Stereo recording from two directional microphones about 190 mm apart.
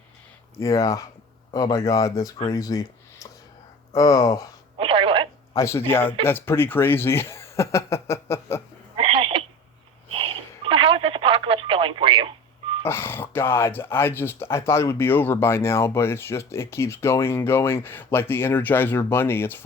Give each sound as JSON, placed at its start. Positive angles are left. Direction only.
{"t": 0.6, "sound": "speech", "side_deg": 15}
{"t": 3.9, "sound": "speech", "side_deg": 20}
{"t": 4.8, "sound": "telephone", "side_deg": -25}
{"t": 5.5, "sound": "speech", "side_deg": 15}
{"t": 9.0, "sound": "a sound", "side_deg": -30}
{"t": 10.2, "sound": "telephone", "side_deg": -30}
{"t": 12.8, "sound": "speech", "side_deg": 10}